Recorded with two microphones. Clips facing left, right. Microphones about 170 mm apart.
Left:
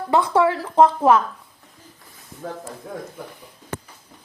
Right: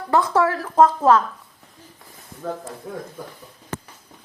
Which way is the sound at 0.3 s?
20° left (ahead or behind).